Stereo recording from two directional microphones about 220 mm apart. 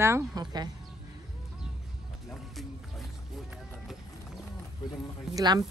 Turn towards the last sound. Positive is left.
turn(degrees=-20)  # may be behind; listen again after turning